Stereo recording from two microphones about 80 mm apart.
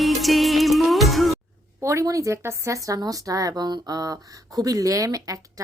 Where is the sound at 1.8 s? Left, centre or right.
Right.